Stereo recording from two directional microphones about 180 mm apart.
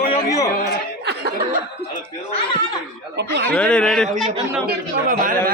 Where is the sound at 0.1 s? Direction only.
20° left (ahead or behind).